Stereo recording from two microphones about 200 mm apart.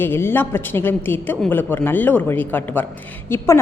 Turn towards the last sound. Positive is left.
turn(degrees=10)  # may be behind; listen again after turning